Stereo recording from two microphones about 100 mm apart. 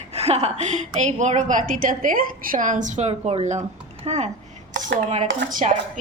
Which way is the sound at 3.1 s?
90° right.